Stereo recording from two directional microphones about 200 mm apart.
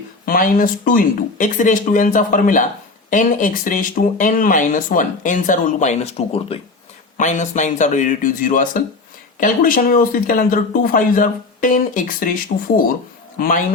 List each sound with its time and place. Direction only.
0.3 s speech: 45° left (ahead or behind)